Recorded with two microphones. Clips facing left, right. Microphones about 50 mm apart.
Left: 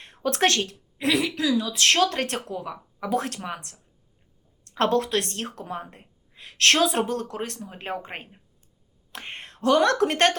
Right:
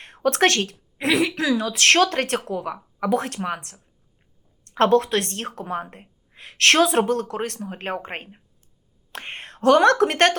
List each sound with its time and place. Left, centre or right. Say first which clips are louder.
0.0 s a woman's voice: right 4 dB; right
4.8 s a woman's voice: right 5 dB; right